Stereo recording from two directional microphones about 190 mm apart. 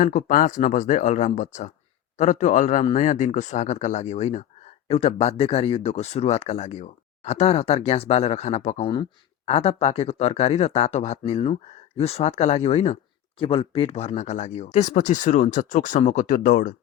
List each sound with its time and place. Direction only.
0.0 s speech: 40° left (ahead or behind)